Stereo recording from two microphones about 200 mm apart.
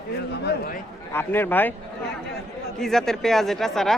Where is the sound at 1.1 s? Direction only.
10° left (ahead or behind).